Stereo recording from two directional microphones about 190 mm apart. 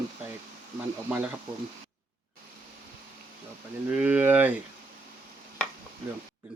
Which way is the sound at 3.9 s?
5° right (ahead or behind).